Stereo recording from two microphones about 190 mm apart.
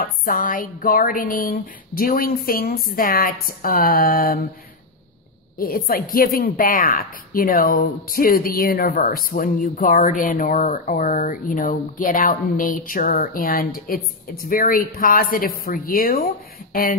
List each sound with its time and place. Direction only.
0.0 s a woman's voice: 45° left (ahead or behind)
5.6 s a woman's voice: 50° left (ahead or behind)